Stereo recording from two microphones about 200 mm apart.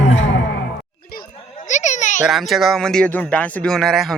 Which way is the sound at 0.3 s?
65° left (ahead or behind).